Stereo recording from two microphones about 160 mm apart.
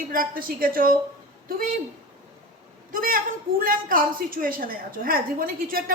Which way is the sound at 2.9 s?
65° right (ahead or behind).